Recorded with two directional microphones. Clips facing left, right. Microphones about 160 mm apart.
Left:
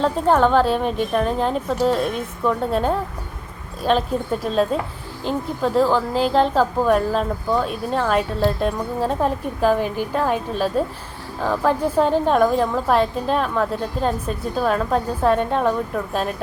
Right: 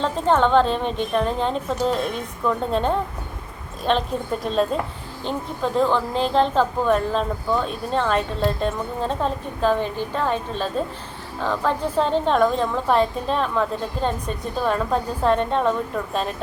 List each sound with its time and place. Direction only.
0.0 s a woman's voice: 5° left (ahead or behind)